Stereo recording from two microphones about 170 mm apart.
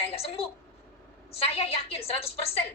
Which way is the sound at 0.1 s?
35° left (ahead or behind).